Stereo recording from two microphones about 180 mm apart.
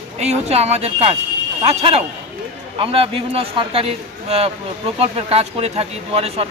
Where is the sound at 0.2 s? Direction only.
35° right (ahead or behind).